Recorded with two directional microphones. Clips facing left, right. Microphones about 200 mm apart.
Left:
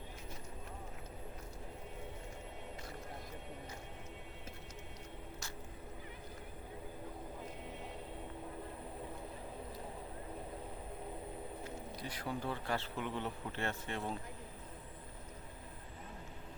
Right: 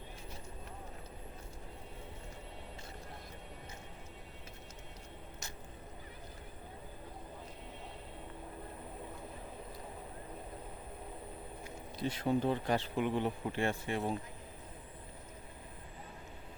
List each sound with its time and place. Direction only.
11.9 s speech: 25° right (ahead or behind)